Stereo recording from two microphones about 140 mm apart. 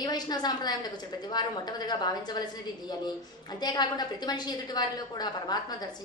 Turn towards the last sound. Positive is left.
turn(degrees=30)  # may be behind; listen again after turning